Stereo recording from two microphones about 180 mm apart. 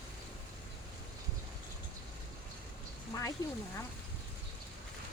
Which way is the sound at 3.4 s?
20° left (ahead or behind).